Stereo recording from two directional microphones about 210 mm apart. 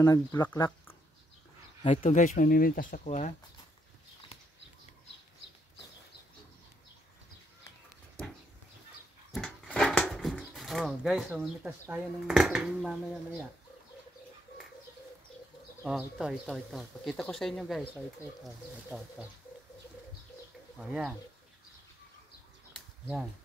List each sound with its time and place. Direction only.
0.0 s speech: 15° left (ahead or behind)
1.8 s speech: 30° left (ahead or behind)
9.3 s speech: 5° left (ahead or behind)
15.8 s speech: centre (ahead or behind)
20.8 s speech: 5° right (ahead or behind)